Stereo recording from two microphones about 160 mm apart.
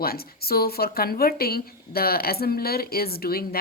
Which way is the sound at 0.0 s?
70° left (ahead or behind).